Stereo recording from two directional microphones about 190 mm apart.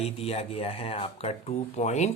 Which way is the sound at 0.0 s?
30° left (ahead or behind).